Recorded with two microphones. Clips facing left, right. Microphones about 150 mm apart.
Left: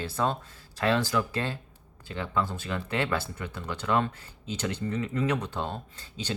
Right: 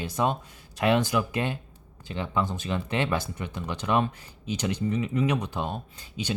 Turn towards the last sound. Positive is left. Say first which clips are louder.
# right 4 dB
turn(degrees=-15)  # may be behind; listen again after turning